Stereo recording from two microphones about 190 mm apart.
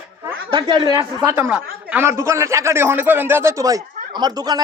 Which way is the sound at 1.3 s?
10° right (ahead or behind).